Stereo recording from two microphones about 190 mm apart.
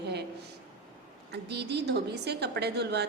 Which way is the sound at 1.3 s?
60° right (ahead or behind).